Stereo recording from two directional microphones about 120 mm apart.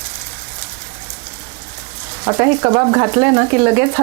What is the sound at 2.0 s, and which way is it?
Speech, 25° right (ahead or behind).